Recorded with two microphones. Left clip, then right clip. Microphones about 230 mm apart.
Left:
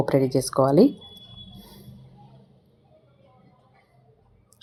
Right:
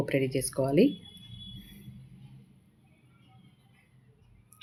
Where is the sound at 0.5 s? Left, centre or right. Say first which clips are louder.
Left 8 dB; centre.